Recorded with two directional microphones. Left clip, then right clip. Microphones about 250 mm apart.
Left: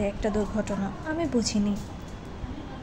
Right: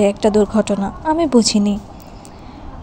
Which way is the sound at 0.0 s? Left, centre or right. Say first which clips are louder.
Right 14 dB; right.